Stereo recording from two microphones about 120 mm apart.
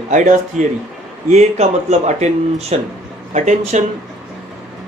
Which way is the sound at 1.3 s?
70° right (ahead or behind).